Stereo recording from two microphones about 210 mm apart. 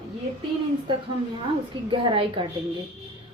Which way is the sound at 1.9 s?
25° right (ahead or behind).